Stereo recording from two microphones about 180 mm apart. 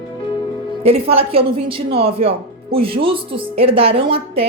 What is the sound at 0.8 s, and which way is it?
A woman's voice, 30° right (ahead or behind).